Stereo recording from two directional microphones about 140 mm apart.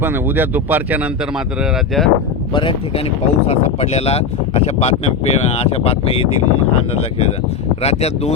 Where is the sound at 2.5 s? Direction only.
35° left (ahead or behind).